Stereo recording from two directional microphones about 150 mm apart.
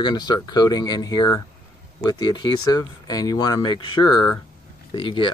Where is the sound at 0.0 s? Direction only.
30° left (ahead or behind).